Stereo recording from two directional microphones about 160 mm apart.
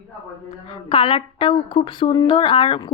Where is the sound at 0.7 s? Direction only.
35° left (ahead or behind).